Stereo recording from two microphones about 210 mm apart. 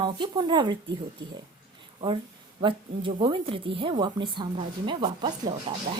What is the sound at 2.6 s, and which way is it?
A woman's voice, 25° right (ahead or behind).